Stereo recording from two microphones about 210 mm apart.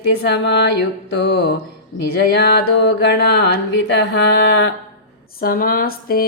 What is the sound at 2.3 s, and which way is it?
Music, 55° left (ahead or behind).